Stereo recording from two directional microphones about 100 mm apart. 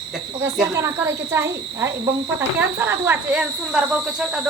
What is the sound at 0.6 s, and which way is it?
Speech, 30° right (ahead or behind).